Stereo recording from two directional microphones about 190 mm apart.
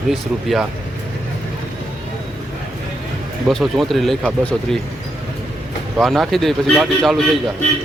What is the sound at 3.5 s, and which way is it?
Speech, centre (ahead or behind).